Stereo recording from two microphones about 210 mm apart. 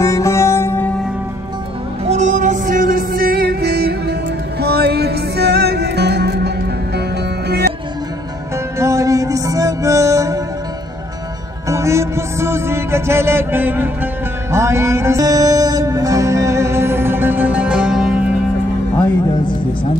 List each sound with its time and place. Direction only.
0.0 s music: 15° left (ahead or behind)
2.0 s music: 35° right (ahead or behind); by 7.7 s 50° right (ahead or behind)
8.7 s music: 15° right (ahead or behind)
11.7 s music: 15° right (ahead or behind)